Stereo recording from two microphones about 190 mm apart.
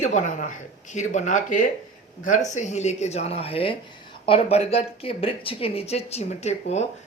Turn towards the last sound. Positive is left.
turn(degrees=35)  # may be behind; listen again after turning